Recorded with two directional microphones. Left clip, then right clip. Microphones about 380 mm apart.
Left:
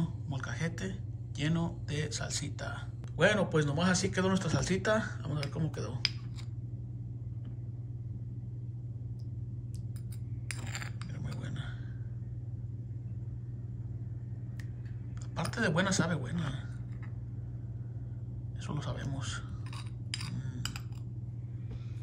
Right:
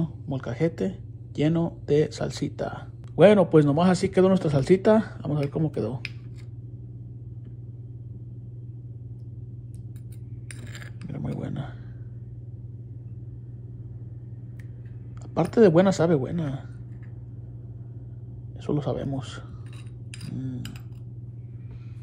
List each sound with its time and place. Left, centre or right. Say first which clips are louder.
0.0 s speech: right 8 dB; centre
10.5 s glass: left 2 dB; centre
15.3 s speech: right 14 dB; centre
18.7 s speech: right 14 dB; centre
20.3 s a sound: right 10 dB; centre